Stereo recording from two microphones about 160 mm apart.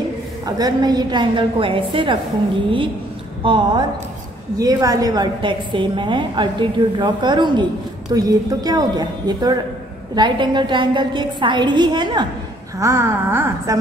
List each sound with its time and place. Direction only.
0.6 s a woman's voice: 25° right (ahead or behind)
3.4 s a woman's voice: 30° right (ahead or behind)
12.7 s a woman's voice: 15° right (ahead or behind)